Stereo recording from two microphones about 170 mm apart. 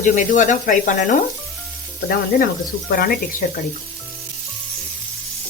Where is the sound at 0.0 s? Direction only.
50° left (ahead or behind).